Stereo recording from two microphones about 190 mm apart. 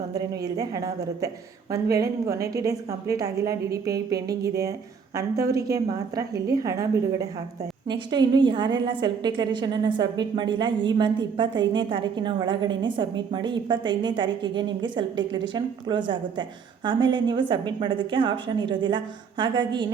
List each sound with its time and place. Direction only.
0.1 s a woman's voice: 20° right (ahead or behind)
5.4 s a woman's voice: 55° right (ahead or behind)
5.7 s a woman's voice: 20° right (ahead or behind)